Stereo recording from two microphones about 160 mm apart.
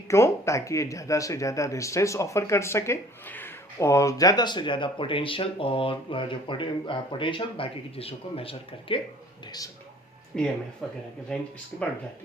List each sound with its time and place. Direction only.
0.1 s speech: 20° left (ahead or behind); by 9.0 s 35° left (ahead or behind)
10.3 s speech: 5° left (ahead or behind)